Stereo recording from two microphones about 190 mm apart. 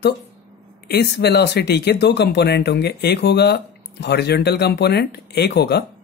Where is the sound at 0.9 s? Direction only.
60° left (ahead or behind).